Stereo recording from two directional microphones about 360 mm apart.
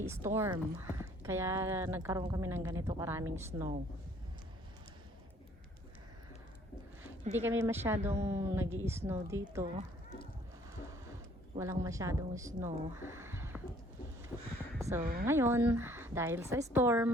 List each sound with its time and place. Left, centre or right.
0.3 s speech: centre
7.3 s speech: centre
10.8 s a sound: centre
14.8 s a sound: centre
15.0 s speech: right
15.3 s speech: centre